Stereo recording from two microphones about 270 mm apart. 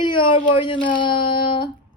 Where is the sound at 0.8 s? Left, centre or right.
Centre.